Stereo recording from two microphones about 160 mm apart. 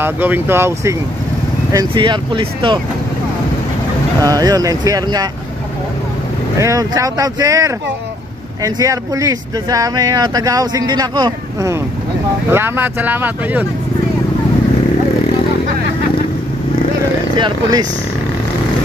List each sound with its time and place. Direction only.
0.0 s speech: 10° right (ahead or behind)
1.7 s speech: 25° right (ahead or behind)
4.2 s speech: 25° right (ahead or behind)
6.6 s speech: 20° right (ahead or behind)
17.4 s speech: 25° right (ahead or behind)